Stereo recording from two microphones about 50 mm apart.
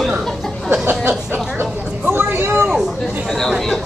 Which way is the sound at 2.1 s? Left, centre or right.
Right.